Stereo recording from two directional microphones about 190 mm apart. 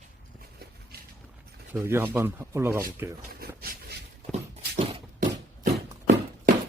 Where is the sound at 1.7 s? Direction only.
10° right (ahead or behind).